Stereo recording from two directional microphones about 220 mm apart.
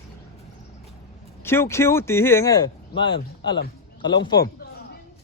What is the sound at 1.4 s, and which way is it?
Speech, 10° left (ahead or behind).